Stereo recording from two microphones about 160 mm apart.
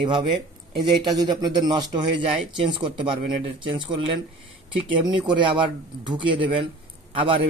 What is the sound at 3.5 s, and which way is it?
A man's voice, 30° right (ahead or behind).